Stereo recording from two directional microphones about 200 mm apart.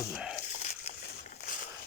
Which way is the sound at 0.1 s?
5° right (ahead or behind).